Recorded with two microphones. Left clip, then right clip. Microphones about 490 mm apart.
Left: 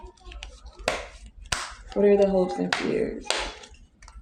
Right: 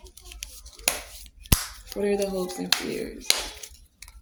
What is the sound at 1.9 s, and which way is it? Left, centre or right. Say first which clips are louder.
Speech: left 7 dB; right.